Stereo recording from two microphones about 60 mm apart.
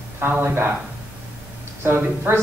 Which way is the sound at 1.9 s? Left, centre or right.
Right.